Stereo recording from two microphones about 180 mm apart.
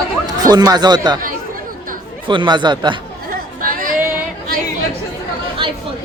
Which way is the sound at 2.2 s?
25° right (ahead or behind).